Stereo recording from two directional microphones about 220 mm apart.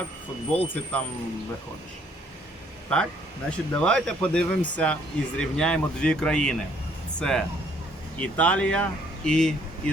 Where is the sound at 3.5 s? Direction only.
5° left (ahead or behind).